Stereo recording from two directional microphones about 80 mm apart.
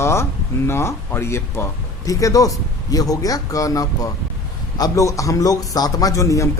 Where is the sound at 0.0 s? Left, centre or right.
Left.